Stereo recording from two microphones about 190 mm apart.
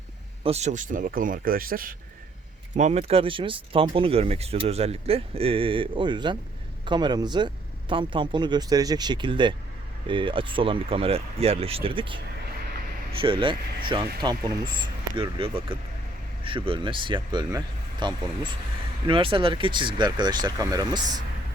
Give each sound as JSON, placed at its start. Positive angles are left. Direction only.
{"t": 0.4, "sound": "a man's voice", "side_deg": -35}
{"t": 2.7, "sound": "speech", "side_deg": -35}